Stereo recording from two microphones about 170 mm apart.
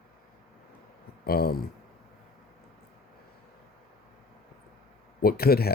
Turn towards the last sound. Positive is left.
turn(degrees=65)  # may be behind; listen again after turning